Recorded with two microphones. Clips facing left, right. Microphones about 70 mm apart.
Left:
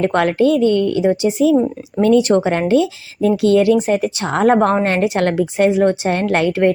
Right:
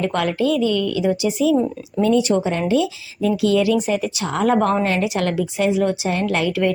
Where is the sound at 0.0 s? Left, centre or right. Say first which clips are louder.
Left 5 dB; left.